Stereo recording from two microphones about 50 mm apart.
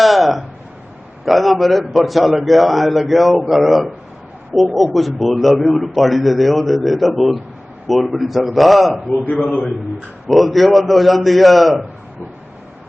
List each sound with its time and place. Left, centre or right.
0.0 s a sound: centre
1.2 s a man's voice: centre
9.1 s a man's voice: left
9.4 s a man's voice: centre